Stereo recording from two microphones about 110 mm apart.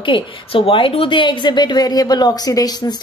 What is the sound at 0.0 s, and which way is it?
A woman's voice, 50° left (ahead or behind).